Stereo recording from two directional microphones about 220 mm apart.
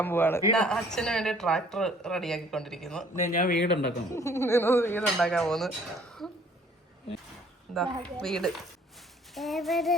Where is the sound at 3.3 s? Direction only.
40° left (ahead or behind).